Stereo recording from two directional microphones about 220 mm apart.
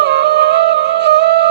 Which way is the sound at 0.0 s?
50° right (ahead or behind).